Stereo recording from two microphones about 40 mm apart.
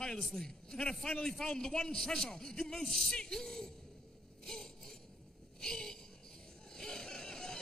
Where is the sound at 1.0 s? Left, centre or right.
Left.